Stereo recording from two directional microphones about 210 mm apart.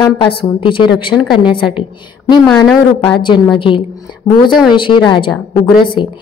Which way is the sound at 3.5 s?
25° left (ahead or behind).